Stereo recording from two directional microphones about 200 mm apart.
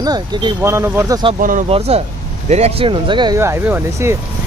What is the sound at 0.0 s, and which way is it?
Speech, 20° right (ahead or behind).